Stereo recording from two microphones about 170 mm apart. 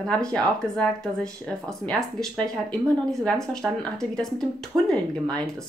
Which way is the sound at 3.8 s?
5° left (ahead or behind).